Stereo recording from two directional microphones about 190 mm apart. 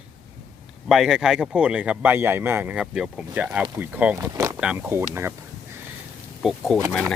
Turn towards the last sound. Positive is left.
turn(degrees=0)  # may be behind; listen again after turning